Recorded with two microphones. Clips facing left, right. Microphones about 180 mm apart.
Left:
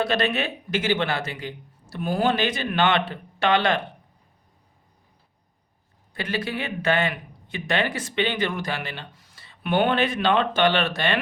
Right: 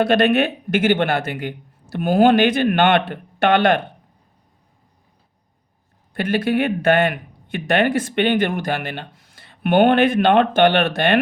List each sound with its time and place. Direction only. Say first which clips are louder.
0.0 s speech: right 8 dB; 55° right (ahead or behind)
6.1 s speech: right 9 dB; 55° right (ahead or behind)